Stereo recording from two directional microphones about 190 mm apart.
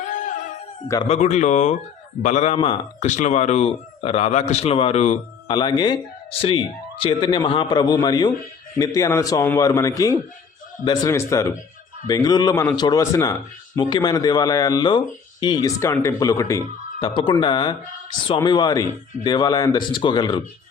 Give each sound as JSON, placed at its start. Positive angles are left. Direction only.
{"t": 0.0, "sound": "music", "side_deg": 45}
{"t": 1.0, "sound": "speech", "side_deg": 35}
{"t": 5.5, "sound": "a man's voice", "side_deg": 25}